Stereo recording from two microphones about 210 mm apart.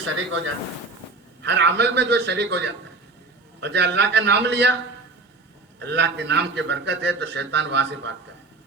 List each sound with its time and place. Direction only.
0.0 s speech: 65° right (ahead or behind)
1.4 s a man's voice: 55° right (ahead or behind)
5.8 s a man's voice: 55° right (ahead or behind)